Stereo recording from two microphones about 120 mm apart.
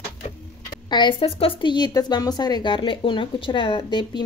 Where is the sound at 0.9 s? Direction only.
40° left (ahead or behind).